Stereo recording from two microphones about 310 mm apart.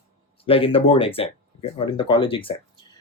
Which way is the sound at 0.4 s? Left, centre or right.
Centre.